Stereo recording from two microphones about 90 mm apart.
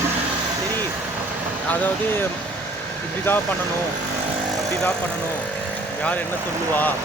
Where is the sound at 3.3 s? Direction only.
25° left (ahead or behind).